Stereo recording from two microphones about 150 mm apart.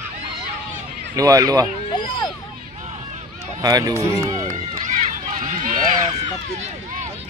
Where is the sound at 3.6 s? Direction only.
25° right (ahead or behind).